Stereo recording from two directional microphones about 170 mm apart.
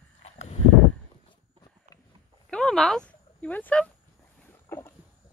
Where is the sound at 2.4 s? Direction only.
5° left (ahead or behind).